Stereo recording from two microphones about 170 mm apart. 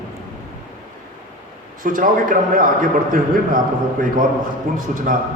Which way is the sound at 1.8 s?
55° right (ahead or behind).